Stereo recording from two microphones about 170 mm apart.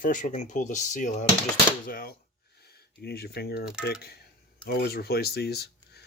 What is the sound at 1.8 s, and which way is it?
Speech, 60° left (ahead or behind).